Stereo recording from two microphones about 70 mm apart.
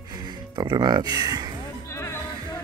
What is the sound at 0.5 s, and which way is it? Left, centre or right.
Speech, right.